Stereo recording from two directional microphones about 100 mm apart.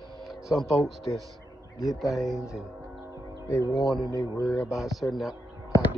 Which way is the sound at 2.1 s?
5° right (ahead or behind).